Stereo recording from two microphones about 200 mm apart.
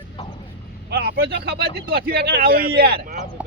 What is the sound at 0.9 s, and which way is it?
Speech, 50° right (ahead or behind).